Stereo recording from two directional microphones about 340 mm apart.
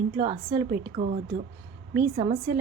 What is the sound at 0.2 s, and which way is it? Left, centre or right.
A woman's voice, centre.